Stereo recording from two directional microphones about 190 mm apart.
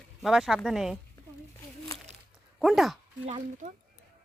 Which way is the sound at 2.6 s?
Centre (ahead or behind).